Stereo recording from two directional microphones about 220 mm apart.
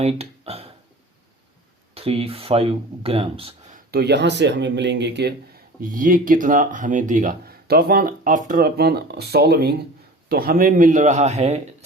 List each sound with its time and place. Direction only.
0.0 s a sound: 25° right (ahead or behind)
2.0 s speech: 25° right (ahead or behind)
3.9 s speech: 50° right (ahead or behind)
5.8 s speech: 40° right (ahead or behind)